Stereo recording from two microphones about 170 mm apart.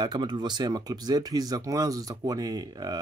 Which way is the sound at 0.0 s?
25° right (ahead or behind).